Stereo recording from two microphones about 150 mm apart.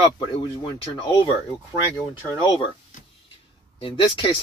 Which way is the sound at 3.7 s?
35° left (ahead or behind).